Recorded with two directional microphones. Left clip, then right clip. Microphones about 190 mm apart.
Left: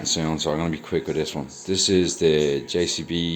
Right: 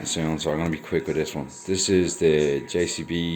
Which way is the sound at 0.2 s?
5° left (ahead or behind).